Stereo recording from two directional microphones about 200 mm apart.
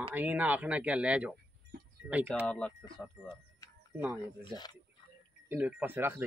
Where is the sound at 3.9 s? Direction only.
10° right (ahead or behind).